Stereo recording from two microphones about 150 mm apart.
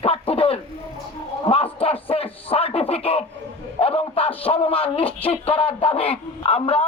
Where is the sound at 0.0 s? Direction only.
40° left (ahead or behind).